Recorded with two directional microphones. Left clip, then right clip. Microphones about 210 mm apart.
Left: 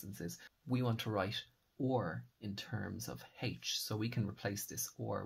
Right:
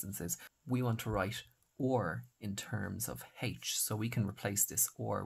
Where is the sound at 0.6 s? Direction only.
20° right (ahead or behind).